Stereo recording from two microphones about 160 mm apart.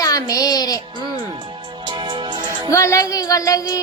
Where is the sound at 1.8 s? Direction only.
30° right (ahead or behind).